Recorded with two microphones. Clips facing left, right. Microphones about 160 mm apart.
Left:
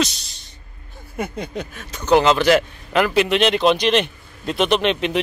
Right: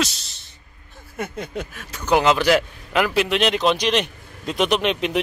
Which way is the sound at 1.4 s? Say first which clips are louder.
Left 1 dB; 5° right (ahead or behind).